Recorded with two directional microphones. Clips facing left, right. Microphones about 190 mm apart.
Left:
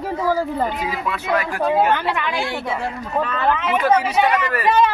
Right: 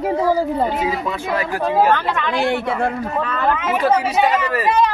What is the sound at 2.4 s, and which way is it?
Speech, 55° right (ahead or behind).